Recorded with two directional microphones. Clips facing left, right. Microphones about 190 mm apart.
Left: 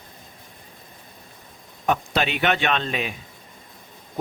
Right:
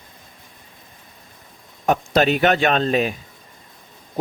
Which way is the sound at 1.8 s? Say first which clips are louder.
Right 6 dB; 40° right (ahead or behind).